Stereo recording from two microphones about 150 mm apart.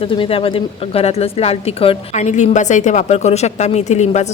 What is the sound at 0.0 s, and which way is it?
Speech, 35° left (ahead or behind).